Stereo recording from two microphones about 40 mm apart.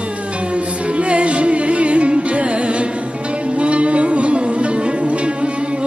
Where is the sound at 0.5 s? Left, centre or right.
Right.